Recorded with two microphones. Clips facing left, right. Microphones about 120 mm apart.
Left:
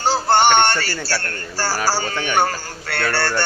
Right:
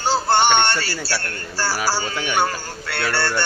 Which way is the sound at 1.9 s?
45° left (ahead or behind).